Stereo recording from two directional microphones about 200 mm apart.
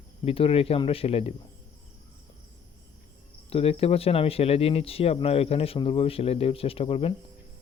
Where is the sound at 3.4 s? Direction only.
30° left (ahead or behind).